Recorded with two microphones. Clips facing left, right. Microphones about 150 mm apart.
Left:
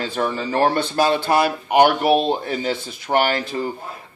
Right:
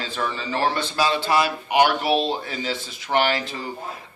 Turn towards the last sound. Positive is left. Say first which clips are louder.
# left 3 dB
turn(degrees=50)  # may be behind; listen again after turning